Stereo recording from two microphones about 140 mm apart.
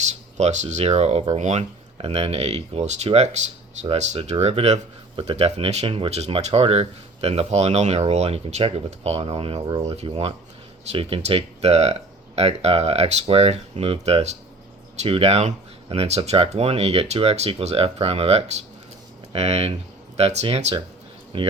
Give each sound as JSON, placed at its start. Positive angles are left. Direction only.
{"t": 0.0, "sound": "speech", "side_deg": -55}
{"t": 21.3, "sound": "speech", "side_deg": -40}